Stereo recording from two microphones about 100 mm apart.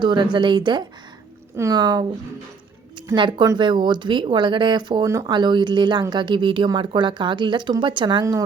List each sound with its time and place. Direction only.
0.0 s speech: 50° right (ahead or behind)
3.2 s speech: 50° right (ahead or behind)
8.2 s speech: 35° right (ahead or behind)